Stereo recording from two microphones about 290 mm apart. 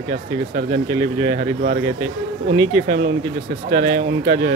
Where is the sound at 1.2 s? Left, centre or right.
Right.